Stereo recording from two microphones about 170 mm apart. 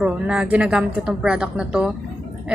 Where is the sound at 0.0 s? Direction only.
5° right (ahead or behind).